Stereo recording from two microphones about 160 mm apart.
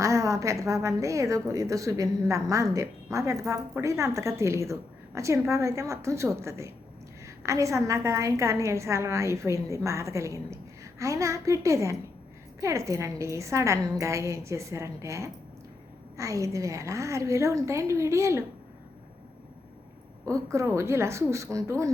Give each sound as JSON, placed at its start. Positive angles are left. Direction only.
{"t": 0.0, "sound": "a woman's voice", "side_deg": -20}
{"t": 20.2, "sound": "a woman's voice", "side_deg": -20}